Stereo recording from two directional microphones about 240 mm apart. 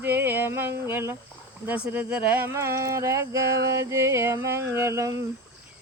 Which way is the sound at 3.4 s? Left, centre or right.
Right.